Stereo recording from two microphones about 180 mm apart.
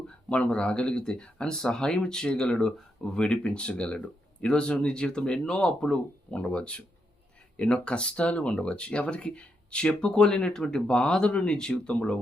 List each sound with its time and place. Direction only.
0.3 s speech: 5° left (ahead or behind)